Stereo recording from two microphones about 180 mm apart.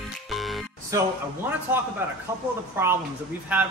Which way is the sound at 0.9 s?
15° right (ahead or behind).